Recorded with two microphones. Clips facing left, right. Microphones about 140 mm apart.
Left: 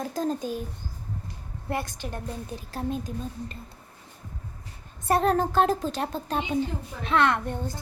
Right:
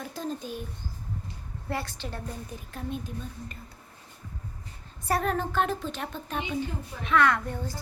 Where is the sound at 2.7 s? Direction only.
35° left (ahead or behind).